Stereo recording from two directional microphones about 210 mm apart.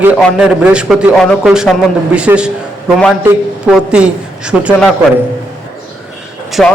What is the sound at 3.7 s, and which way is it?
A man's voice, 5° right (ahead or behind).